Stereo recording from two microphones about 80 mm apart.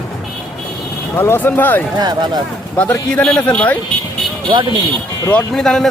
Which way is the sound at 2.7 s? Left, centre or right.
Centre.